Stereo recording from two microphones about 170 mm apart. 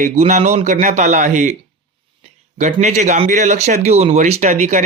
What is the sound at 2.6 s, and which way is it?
Speech, 45° right (ahead or behind).